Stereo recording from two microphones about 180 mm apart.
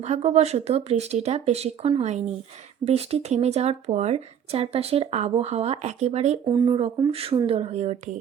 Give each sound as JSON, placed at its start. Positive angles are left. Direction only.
{"t": 0.0, "sound": "speech", "side_deg": -35}